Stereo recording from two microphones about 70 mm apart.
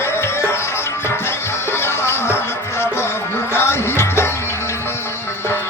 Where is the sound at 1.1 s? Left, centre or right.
Left.